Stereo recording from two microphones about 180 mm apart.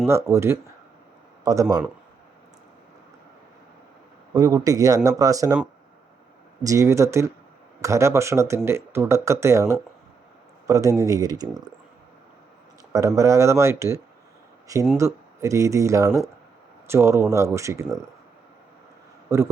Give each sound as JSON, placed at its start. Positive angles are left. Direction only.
{"t": 0.1, "sound": "speech", "side_deg": -15}
{"t": 4.4, "sound": "speech", "side_deg": -20}
{"t": 6.6, "sound": "speech", "side_deg": -20}
{"t": 12.9, "sound": "speech", "side_deg": -20}
{"t": 19.3, "sound": "speech", "side_deg": -15}